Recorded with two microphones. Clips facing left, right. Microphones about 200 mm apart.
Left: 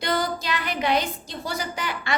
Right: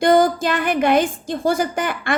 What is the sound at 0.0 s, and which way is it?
A woman's voice, 50° right (ahead or behind).